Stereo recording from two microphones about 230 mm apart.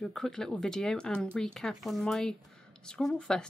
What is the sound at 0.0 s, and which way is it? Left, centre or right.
Speech, centre.